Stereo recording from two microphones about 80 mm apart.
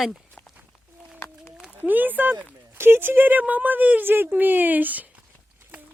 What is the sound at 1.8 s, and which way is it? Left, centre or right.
Speech, right.